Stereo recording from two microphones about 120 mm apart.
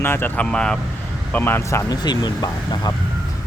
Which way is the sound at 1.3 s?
15° left (ahead or behind).